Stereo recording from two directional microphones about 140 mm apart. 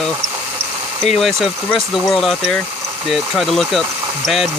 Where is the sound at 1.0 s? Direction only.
Centre (ahead or behind).